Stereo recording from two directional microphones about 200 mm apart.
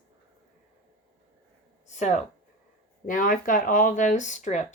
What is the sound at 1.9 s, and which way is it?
Speech, 35° left (ahead or behind).